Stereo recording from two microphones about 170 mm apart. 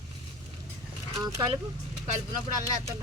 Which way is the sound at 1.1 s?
25° right (ahead or behind).